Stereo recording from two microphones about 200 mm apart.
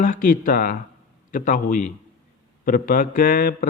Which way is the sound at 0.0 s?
45° left (ahead or behind).